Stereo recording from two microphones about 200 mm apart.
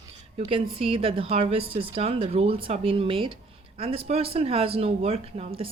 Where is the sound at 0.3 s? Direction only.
30° right (ahead or behind).